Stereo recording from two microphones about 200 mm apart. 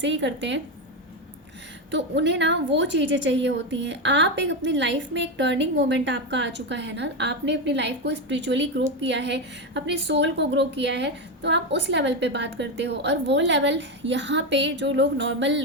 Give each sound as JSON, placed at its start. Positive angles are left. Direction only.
{"t": 0.0, "sound": "a woman's voice", "side_deg": -65}
{"t": 1.9, "sound": "a woman's voice", "side_deg": -65}